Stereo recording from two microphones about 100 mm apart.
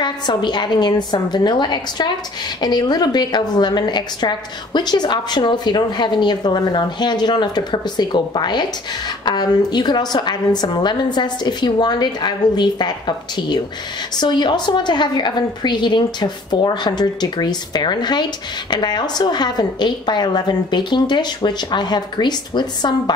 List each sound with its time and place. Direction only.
0.0 s a woman's voice: 50° left (ahead or behind)